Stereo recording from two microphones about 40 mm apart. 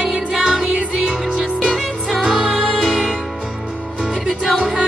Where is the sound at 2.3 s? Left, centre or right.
Right.